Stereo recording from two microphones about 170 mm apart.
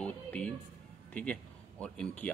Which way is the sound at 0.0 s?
5° left (ahead or behind).